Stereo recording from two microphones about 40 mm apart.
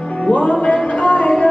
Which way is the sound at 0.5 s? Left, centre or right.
Left.